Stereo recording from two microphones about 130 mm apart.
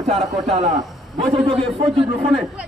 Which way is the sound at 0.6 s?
65° right (ahead or behind).